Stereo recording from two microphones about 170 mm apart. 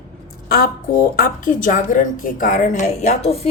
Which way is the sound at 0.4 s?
60° left (ahead or behind).